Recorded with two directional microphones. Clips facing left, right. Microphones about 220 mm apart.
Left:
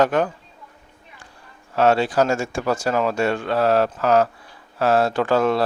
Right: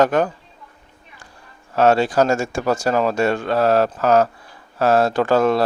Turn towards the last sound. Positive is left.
turn(degrees=-45)  # may be behind; listen again after turning